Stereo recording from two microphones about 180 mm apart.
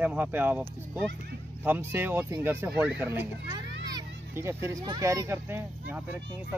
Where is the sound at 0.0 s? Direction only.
10° right (ahead or behind).